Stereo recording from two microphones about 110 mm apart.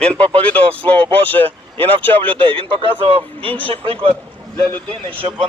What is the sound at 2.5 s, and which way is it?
A man's voice, 50° right (ahead or behind).